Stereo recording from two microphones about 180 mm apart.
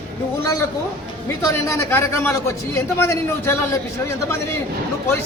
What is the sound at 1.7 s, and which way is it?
A man's voice, 15° left (ahead or behind).